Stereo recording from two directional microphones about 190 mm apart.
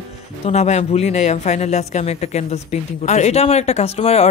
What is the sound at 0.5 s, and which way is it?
Speech, 35° left (ahead or behind).